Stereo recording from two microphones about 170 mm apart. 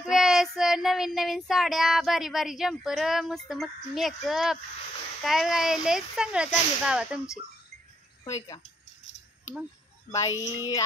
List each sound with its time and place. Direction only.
0.0 s child singing: centre (ahead or behind)
8.2 s speech: 20° left (ahead or behind)
10.1 s speech: 20° left (ahead or behind)